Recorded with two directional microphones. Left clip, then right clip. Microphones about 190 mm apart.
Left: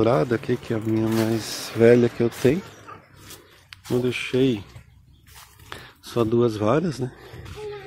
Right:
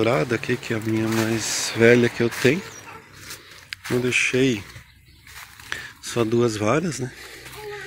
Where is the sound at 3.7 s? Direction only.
5° left (ahead or behind).